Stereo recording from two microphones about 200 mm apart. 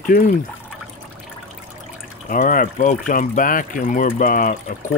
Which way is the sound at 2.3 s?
40° left (ahead or behind).